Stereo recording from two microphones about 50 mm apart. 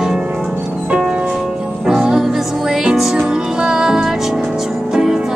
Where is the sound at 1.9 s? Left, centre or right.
Centre.